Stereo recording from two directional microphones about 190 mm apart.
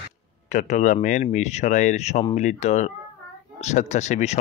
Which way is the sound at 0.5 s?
40° left (ahead or behind).